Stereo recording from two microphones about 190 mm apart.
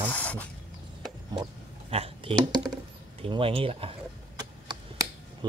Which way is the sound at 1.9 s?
30° right (ahead or behind).